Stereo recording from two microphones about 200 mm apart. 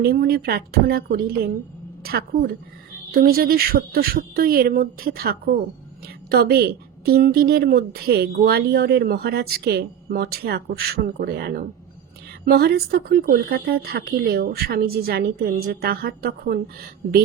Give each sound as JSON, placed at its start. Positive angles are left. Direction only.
{"t": 0.0, "sound": "a woman's voice", "side_deg": -50}